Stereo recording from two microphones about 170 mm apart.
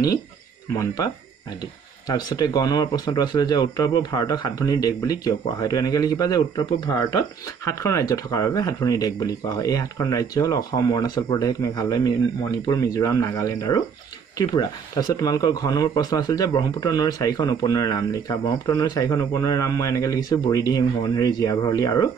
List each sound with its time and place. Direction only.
0.7 s speech: 20° left (ahead or behind)